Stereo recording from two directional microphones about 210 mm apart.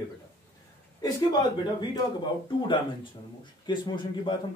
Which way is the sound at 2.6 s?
20° left (ahead or behind).